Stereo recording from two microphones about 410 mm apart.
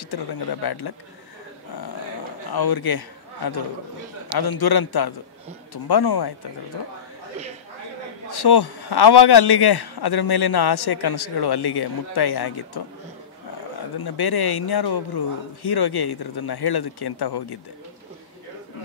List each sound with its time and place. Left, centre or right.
0.1 s a man's voice: left
2.5 s a man's voice: left
8.3 s a man's voice: left
13.9 s a man's voice: left